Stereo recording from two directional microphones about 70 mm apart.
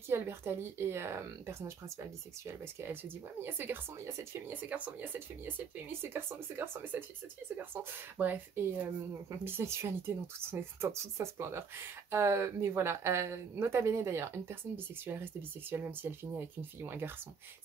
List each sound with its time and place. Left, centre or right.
0.1 s speech: right
4.5 s speech: right
15.7 s speech: right